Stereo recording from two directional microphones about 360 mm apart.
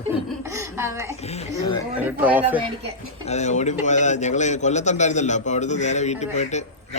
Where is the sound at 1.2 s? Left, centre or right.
Centre.